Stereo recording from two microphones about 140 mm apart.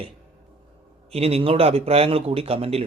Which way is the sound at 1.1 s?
45° right (ahead or behind).